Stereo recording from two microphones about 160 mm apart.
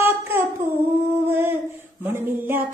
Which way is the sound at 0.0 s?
15° right (ahead or behind).